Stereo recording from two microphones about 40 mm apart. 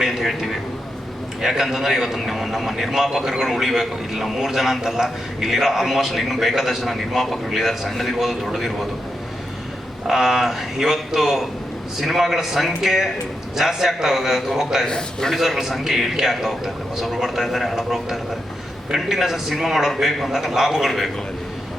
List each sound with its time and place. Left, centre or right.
0.0 s a man's voice: centre
10.1 s a man's voice: centre
14.8 s a man's voice: centre
15.4 s a man's voice: centre